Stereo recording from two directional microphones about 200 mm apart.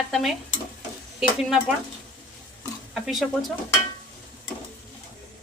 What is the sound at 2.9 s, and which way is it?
Speech, centre (ahead or behind).